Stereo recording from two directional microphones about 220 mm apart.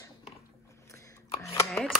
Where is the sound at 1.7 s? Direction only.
Centre (ahead or behind).